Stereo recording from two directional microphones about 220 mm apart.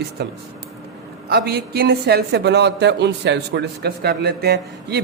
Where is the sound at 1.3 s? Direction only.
45° right (ahead or behind).